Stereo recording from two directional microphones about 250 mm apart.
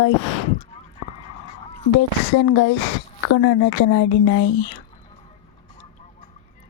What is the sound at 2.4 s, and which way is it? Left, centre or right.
A woman's voice, left.